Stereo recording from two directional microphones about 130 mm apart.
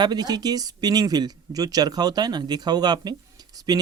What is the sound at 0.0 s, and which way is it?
Speech, 30° right (ahead or behind).